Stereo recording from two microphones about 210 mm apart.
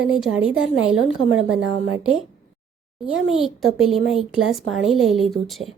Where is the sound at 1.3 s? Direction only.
80° right.